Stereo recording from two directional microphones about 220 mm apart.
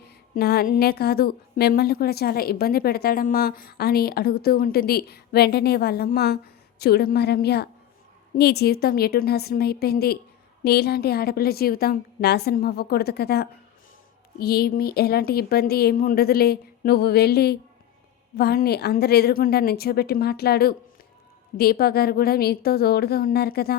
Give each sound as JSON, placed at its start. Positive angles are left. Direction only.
{"t": 0.3, "sound": "a woman's voice", "side_deg": 45}